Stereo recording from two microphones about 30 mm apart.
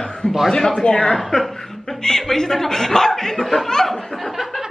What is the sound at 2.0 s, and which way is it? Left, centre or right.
Speech, centre.